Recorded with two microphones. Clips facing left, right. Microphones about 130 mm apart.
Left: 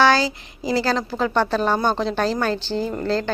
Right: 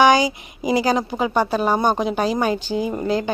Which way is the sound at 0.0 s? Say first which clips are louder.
Right 2 dB; 15° right (ahead or behind).